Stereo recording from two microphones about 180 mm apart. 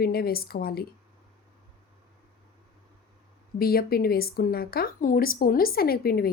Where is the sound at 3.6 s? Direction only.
55° left (ahead or behind).